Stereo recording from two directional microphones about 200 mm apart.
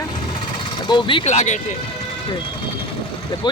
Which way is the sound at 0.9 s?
25° left (ahead or behind).